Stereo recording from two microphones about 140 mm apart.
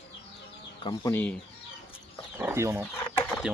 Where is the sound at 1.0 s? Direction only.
15° left (ahead or behind).